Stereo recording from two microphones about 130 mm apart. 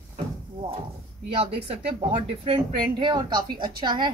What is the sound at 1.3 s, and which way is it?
A woman's voice, 45° right (ahead or behind).